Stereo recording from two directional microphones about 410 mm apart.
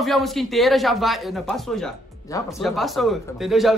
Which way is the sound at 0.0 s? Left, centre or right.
Centre.